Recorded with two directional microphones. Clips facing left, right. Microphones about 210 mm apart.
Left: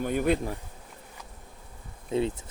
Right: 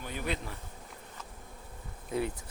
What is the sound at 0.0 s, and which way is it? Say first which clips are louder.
Speech: left 11 dB; 50° left (ahead or behind).